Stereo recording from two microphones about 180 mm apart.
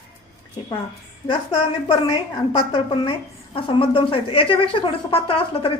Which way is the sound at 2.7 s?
25° left (ahead or behind).